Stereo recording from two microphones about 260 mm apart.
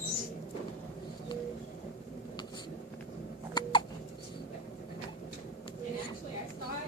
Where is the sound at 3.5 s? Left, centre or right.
Centre.